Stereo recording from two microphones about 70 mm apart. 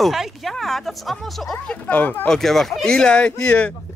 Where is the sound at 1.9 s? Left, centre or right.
Left.